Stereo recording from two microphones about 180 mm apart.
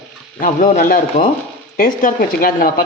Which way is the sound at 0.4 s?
45° left (ahead or behind).